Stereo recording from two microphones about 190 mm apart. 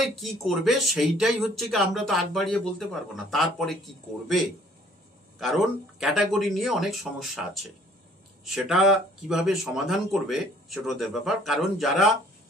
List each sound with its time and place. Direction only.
0.0 s speech: centre (ahead or behind)
5.4 s speech: centre (ahead or behind)